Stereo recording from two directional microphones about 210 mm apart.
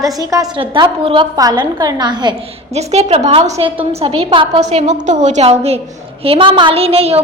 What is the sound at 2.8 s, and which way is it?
A woman's voice, 30° right (ahead or behind).